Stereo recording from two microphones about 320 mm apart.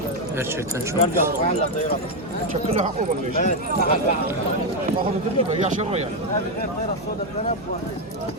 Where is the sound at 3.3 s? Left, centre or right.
Left.